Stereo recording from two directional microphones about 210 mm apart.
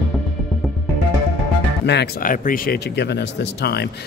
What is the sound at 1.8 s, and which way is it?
Speech, 45° left (ahead or behind).